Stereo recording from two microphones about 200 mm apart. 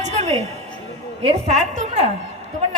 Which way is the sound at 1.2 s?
35° right (ahead or behind).